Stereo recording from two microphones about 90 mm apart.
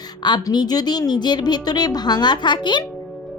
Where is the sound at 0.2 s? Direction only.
55° left (ahead or behind).